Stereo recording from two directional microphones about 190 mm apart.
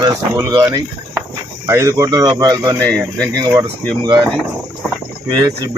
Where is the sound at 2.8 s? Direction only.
5° left (ahead or behind).